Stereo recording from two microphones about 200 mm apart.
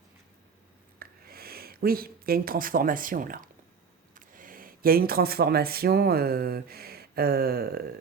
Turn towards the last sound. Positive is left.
turn(degrees=-50)  # may be behind; listen again after turning